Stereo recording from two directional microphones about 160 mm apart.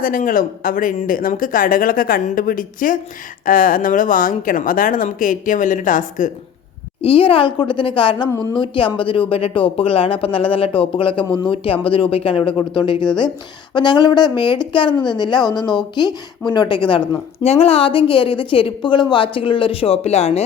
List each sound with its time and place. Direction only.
0.0 s speech: 60° left (ahead or behind)
7.0 s a woman's voice: 35° left (ahead or behind)
11.2 s speech: 5° left (ahead or behind)
11.5 s a woman's voice: 35° left (ahead or behind)
16.5 s a woman's voice: 30° left (ahead or behind)